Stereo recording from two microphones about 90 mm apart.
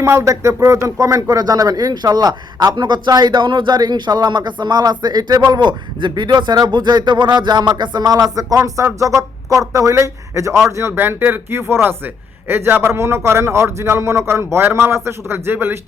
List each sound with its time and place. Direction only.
0.0 s a man's voice: 30° right (ahead or behind)